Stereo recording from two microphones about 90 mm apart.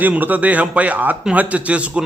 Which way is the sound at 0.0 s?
20° right (ahead or behind).